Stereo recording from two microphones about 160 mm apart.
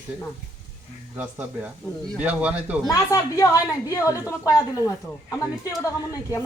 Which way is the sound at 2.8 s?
20° left (ahead or behind).